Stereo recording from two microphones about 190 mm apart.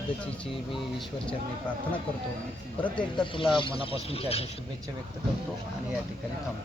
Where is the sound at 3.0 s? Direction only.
25° left (ahead or behind).